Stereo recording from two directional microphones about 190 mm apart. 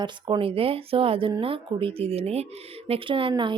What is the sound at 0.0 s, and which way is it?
Speech, 25° right (ahead or behind).